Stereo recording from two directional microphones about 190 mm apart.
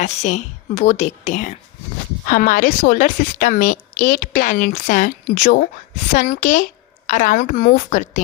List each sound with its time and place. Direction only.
0.0 s a woman's voice: 40° left (ahead or behind)